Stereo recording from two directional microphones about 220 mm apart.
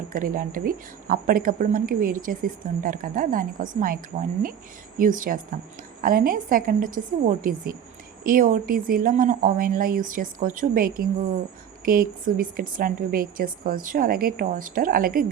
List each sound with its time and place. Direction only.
0.1 s speech: 40° right (ahead or behind)